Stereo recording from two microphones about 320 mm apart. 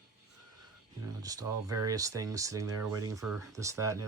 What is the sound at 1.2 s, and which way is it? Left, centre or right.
Speech, centre.